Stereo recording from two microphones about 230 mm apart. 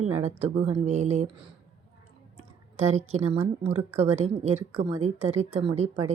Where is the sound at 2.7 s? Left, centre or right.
Right.